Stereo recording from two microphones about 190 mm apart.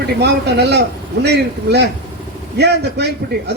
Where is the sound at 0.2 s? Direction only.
60° right (ahead or behind).